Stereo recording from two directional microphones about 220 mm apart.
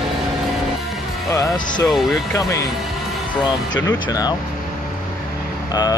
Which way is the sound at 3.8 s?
15° left (ahead or behind).